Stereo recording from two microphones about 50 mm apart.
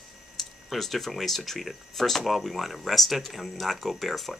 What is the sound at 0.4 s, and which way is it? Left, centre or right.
Speech, centre.